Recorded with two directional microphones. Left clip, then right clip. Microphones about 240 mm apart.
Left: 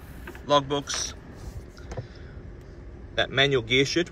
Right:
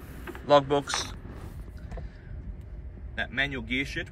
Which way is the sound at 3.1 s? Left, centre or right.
Centre.